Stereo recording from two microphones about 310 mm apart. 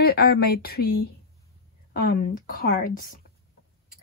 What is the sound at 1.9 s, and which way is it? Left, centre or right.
Speech, left.